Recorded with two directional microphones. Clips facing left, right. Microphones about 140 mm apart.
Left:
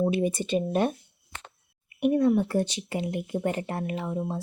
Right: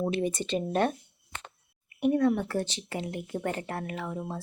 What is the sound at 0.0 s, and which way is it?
Speech, 10° left (ahead or behind).